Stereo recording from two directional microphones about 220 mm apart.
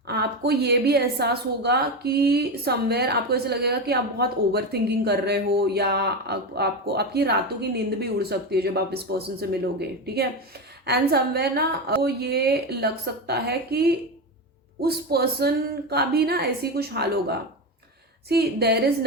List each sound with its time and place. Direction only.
0.1 s a woman's voice: 50° right (ahead or behind)
10.8 s a woman's voice: 45° right (ahead or behind)